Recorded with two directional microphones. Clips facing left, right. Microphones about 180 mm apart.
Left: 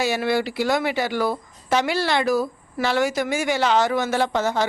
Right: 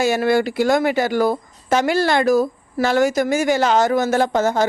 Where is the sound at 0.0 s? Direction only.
50° right (ahead or behind).